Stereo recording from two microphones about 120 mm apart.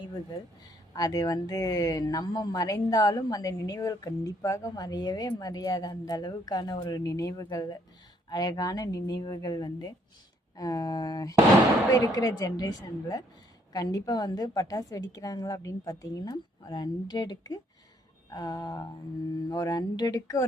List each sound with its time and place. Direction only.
0.9 s speech: 30° left (ahead or behind)